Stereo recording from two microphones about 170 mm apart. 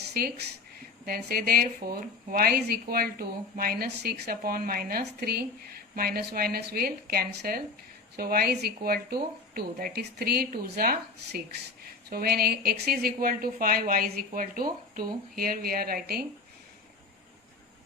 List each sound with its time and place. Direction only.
0.1 s speech: 70° right (ahead or behind)